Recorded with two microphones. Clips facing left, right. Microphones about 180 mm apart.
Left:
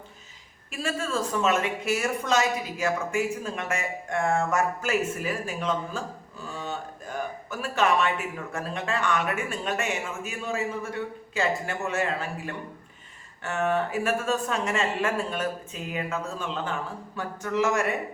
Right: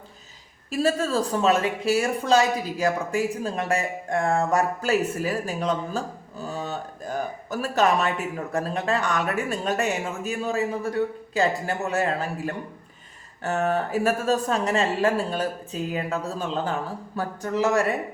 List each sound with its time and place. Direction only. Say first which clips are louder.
0.7 s speech: right 7 dB; 40° right (ahead or behind)
6.4 s a sound: right 4 dB; 40° right (ahead or behind)
8.5 s speech: right 5 dB; 40° right (ahead or behind)